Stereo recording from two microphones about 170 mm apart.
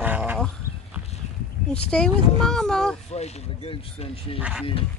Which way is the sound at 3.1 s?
40° left (ahead or behind).